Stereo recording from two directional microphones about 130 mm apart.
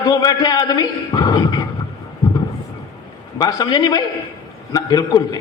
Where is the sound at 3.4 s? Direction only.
30° left (ahead or behind).